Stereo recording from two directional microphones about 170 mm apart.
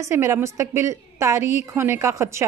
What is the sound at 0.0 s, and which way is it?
A woman's voice, 15° right (ahead or behind).